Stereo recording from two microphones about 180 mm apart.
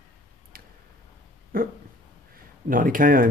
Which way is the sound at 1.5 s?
55° right (ahead or behind).